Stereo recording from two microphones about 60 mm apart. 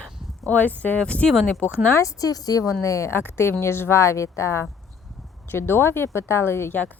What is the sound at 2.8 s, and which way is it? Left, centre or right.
Speech, left.